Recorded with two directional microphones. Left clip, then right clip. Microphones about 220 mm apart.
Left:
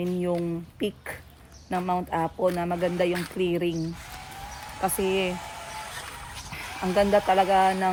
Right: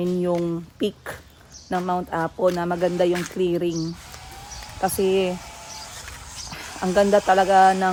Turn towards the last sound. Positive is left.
turn(degrees=-20)  # may be behind; listen again after turning